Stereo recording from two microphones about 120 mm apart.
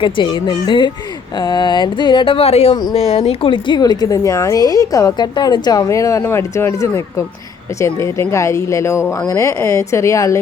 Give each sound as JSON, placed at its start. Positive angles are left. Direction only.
{"t": 0.0, "sound": "speech", "side_deg": 40}